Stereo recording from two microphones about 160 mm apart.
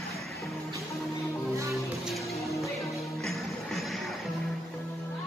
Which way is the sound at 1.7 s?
Centre (ahead or behind).